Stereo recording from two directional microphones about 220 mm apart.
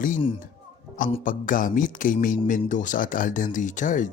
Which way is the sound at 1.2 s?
35° left (ahead or behind).